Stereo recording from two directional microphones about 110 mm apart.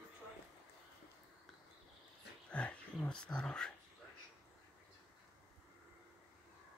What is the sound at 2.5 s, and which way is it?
Speech, 10° left (ahead or behind).